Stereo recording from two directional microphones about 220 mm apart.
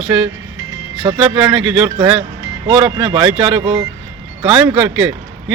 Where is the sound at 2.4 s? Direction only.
20° right (ahead or behind).